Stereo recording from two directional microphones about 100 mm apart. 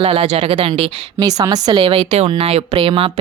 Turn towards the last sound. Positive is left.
turn(degrees=-65)  # may be behind; listen again after turning